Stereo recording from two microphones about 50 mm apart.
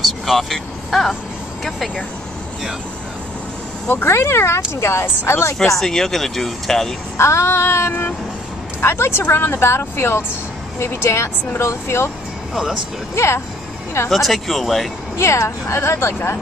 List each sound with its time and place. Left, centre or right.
0.0 s vehicle: centre
3.9 s speech: left
5.8 s speech: centre
7.2 s speech: left
8.8 s speech: left
10.8 s speech: left
13.1 s speech: left
14.1 s speech: centre
15.1 s speech: left